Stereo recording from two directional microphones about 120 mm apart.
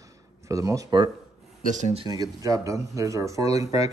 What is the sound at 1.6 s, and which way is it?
Speech, 90° right.